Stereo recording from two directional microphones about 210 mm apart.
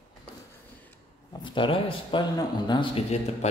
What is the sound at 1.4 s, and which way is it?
Speech, 25° left (ahead or behind).